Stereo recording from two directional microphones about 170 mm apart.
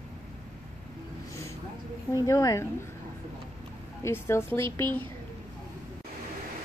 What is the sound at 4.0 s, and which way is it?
Speech, 15° left (ahead or behind).